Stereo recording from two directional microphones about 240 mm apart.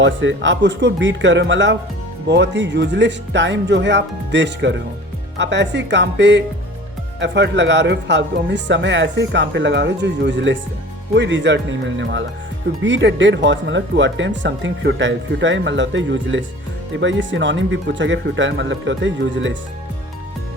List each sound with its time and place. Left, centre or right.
0.0 s speech: right